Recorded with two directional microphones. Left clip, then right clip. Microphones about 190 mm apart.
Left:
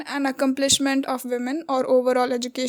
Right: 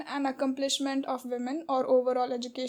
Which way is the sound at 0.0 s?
30° left (ahead or behind).